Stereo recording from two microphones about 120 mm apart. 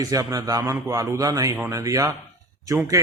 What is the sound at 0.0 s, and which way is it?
A man's voice, 30° right (ahead or behind).